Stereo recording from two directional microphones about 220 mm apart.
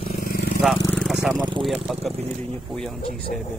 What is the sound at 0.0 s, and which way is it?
Vehicle, 40° left (ahead or behind).